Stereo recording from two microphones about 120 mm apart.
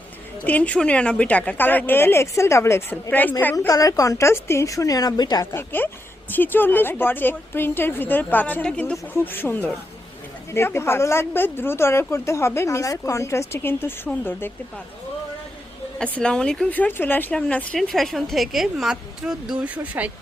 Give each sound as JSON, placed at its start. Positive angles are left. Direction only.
{"t": 0.4, "sound": "a woman's voice", "side_deg": 10}
{"t": 3.7, "sound": "a woman's voice", "side_deg": 30}
{"t": 5.5, "sound": "a woman's voice", "side_deg": 15}
{"t": 16.1, "sound": "a woman's voice", "side_deg": 10}